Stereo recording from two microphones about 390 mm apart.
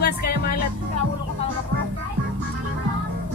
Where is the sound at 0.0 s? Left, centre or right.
Left.